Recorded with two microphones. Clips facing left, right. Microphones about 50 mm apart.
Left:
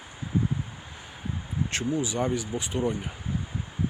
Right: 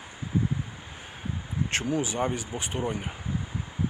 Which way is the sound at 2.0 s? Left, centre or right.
Right.